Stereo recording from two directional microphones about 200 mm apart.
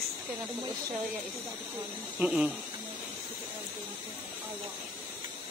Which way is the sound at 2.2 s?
5° right (ahead or behind).